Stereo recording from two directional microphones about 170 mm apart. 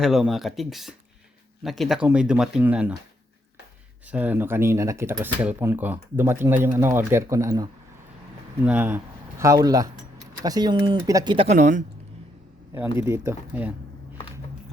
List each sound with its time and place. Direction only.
0.0 s speech: centre (ahead or behind)
4.0 s speech: 10° right (ahead or behind)
8.6 s speech: 10° right (ahead or behind); by 11.4 s 25° right (ahead or behind)
11.4 s speech: 45° right (ahead or behind)
13.0 s speech: 15° right (ahead or behind)